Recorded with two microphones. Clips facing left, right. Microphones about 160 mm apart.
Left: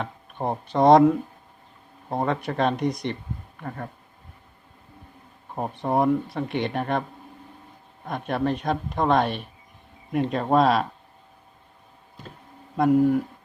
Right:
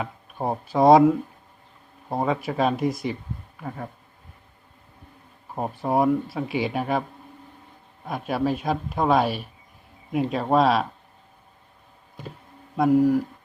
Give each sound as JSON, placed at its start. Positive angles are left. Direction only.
{"t": 0.0, "sound": "a man's voice", "side_deg": -5}
{"t": 5.5, "sound": "a man's voice", "side_deg": -5}
{"t": 8.0, "sound": "a man's voice", "side_deg": -5}
{"t": 12.7, "sound": "a man's voice", "side_deg": 0}